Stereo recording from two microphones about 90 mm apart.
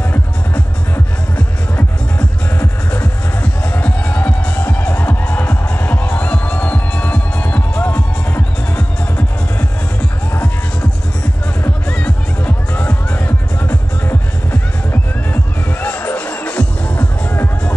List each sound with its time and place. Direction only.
0.9 s music: 20° left (ahead or behind)
12.0 s music: 20° left (ahead or behind)